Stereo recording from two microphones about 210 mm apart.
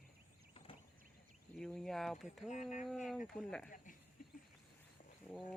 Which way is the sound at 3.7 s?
40° left (ahead or behind).